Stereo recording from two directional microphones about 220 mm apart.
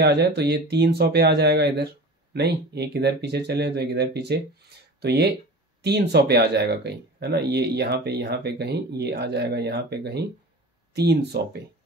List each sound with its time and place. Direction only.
0.0 s speech: 50° right (ahead or behind)